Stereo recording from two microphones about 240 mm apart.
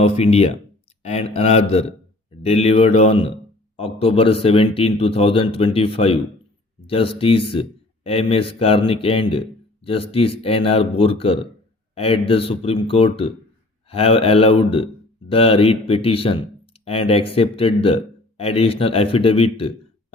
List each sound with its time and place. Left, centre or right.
0.0 s speech: left